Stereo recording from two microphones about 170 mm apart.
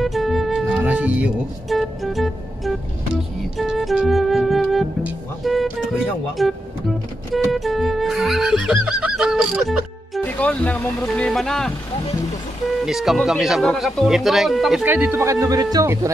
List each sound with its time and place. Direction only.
0.0 s music: centre (ahead or behind)
5.0 s speech: centre (ahead or behind)
6.3 s music: centre (ahead or behind)
10.3 s speech: 10° left (ahead or behind)
12.8 s speech: centre (ahead or behind); by 16.1 s 20° right (ahead or behind)